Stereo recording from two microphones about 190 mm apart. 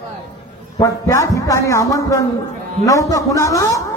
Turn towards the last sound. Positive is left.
turn(degrees=15)  # may be behind; listen again after turning